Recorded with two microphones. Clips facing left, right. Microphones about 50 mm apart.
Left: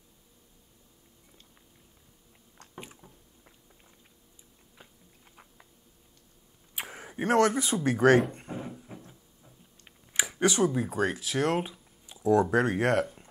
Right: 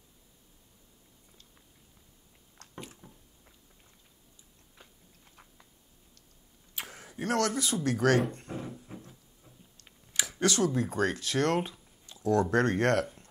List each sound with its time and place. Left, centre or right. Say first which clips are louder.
3.0 s rowboat: even; centre
5.3 s chewing: left 2 dB; centre
6.7 s speech: left 3 dB; centre
8.3 s a sound: left 1 dB; centre
10.1 s speech: left 2 dB; centre